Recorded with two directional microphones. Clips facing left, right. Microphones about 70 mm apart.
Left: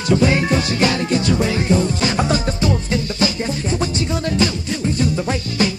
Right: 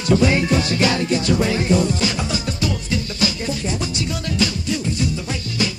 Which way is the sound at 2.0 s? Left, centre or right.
Left.